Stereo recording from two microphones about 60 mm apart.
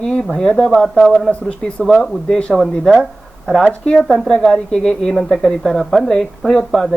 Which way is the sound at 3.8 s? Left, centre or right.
Centre.